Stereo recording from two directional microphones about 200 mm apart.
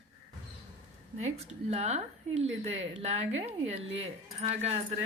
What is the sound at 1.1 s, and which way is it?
Speech, 35° right (ahead or behind).